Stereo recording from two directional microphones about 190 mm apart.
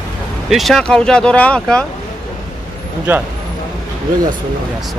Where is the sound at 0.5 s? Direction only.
Centre (ahead or behind).